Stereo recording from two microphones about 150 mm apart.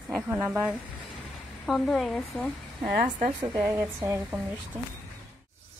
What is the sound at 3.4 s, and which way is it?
Speech, 10° right (ahead or behind).